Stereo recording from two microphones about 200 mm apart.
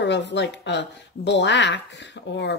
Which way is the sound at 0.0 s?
60° left (ahead or behind).